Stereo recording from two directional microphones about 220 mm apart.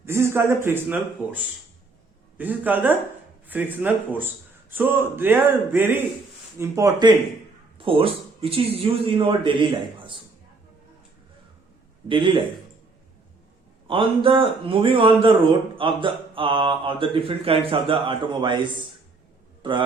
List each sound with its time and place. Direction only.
0.0 s speech: 10° right (ahead or behind)
2.4 s speech: 10° right (ahead or behind)
12.0 s speech: 25° right (ahead or behind)
13.8 s speech: 25° right (ahead or behind)